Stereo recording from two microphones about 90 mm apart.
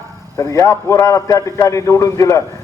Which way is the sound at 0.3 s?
35° left (ahead or behind).